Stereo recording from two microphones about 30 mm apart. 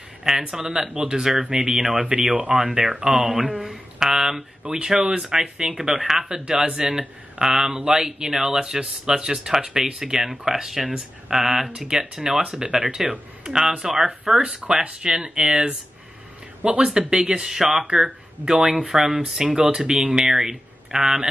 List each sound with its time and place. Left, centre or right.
0.2 s speech: centre; by 2.6 s right
2.6 s speech: right
5.7 s speech: centre
13.1 s speech: right
13.6 s speech: centre
14.4 s speech: right
17.5 s speech: centre
18.5 s speech: right